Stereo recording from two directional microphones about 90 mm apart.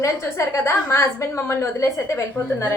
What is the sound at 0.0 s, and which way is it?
A woman's voice, 35° left (ahead or behind).